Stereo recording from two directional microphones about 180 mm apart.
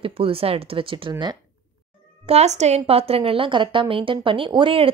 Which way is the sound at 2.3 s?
40° right (ahead or behind).